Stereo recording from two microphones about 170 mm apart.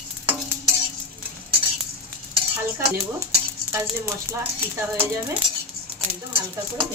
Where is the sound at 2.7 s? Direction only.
15° right (ahead or behind).